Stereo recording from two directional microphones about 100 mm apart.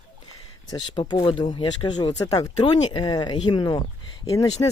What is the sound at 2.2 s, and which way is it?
Speech, 35° left (ahead or behind).